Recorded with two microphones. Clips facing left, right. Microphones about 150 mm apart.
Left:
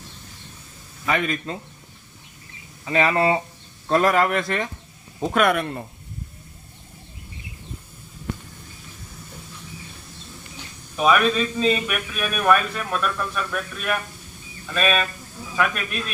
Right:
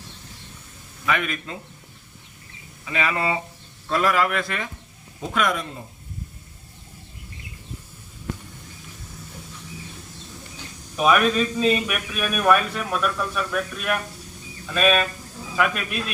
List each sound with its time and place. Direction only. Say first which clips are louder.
1.0 s speech: left 2 dB; 35° left (ahead or behind)
2.8 s speech: left 5 dB; 35° left (ahead or behind)
5.3 s speech: left 4 dB; 60° left (ahead or behind)
10.9 s a man's voice: even; 5° right (ahead or behind)